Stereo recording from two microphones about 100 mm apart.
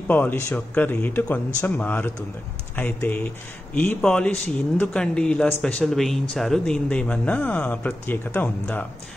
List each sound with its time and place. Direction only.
0.1 s speech: 20° left (ahead or behind)
4.0 s speech: 10° left (ahead or behind)